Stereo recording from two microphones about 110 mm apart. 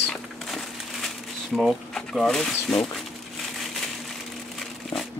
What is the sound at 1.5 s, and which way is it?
Speech, centre (ahead or behind).